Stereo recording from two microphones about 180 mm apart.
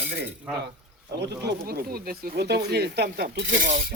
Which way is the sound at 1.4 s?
65° right (ahead or behind).